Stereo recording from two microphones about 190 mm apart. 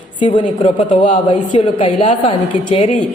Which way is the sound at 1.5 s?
25° left (ahead or behind).